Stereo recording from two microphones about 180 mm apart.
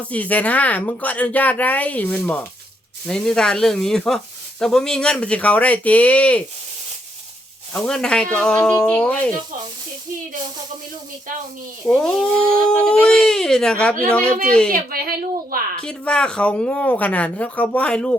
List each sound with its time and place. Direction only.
0.1 s speech: 10° left (ahead or behind)
7.7 s speech: 5° left (ahead or behind)
11.9 s speech: 5° left (ahead or behind)
14.7 s a woman's voice: 55° right (ahead or behind)
15.8 s speech: 5° left (ahead or behind)